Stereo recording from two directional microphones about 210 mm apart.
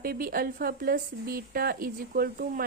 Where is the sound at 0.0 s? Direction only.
45° right (ahead or behind).